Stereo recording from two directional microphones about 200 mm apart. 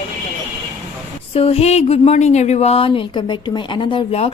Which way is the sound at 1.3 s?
30° left (ahead or behind).